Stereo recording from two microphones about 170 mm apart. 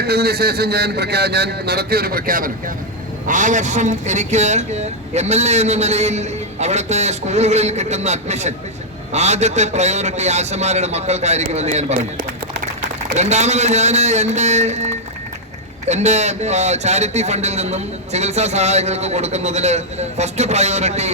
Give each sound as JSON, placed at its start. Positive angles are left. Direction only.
{"t": 0.0, "sound": "a man's voice", "side_deg": -70}
{"t": 13.1, "sound": "speech", "side_deg": -40}